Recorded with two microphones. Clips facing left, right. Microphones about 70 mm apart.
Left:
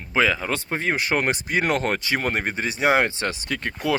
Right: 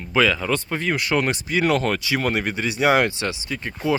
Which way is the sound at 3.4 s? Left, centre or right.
Left.